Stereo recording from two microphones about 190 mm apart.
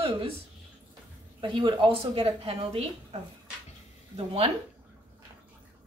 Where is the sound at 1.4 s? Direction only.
25° right (ahead or behind).